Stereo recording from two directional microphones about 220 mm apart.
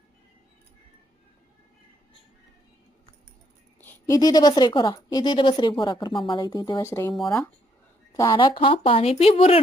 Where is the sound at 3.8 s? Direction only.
10° left (ahead or behind); by 9.6 s 25° left (ahead or behind).